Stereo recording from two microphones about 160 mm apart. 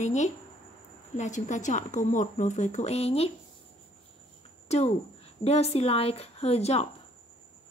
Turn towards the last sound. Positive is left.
turn(degrees=40)  # may be behind; listen again after turning